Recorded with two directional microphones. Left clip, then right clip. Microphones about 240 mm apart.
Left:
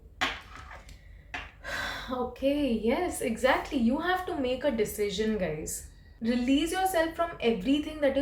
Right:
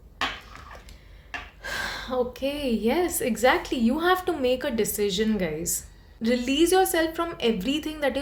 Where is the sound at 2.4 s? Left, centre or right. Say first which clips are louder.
Right 1 dB; right.